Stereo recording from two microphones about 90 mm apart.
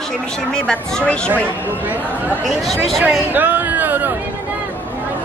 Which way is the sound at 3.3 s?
20° right (ahead or behind).